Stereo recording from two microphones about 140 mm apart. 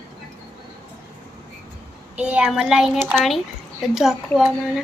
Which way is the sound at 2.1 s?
10° right (ahead or behind).